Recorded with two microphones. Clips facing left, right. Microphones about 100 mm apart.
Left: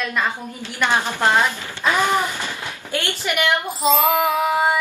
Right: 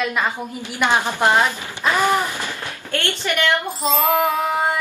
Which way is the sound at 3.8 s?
Centre (ahead or behind).